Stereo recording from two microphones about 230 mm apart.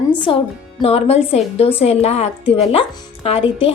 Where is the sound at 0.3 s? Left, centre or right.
Left.